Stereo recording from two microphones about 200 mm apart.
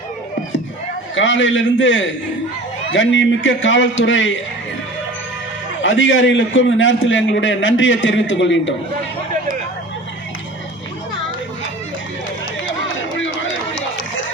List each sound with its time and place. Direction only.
1.1 s a man's voice: 70° left (ahead or behind)
5.8 s a man's voice: 70° left (ahead or behind)